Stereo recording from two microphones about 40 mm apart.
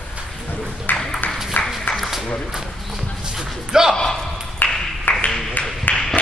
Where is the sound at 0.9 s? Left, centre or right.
Left.